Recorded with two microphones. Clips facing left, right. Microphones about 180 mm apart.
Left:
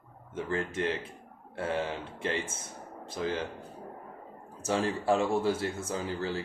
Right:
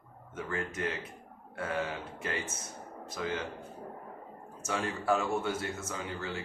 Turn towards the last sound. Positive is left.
turn(degrees=35)  # may be behind; listen again after turning